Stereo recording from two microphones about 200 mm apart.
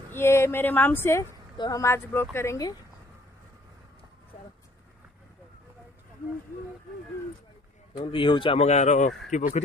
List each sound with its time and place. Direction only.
0.1 s speech: 10° left (ahead or behind)
7.9 s speech: 25° left (ahead or behind)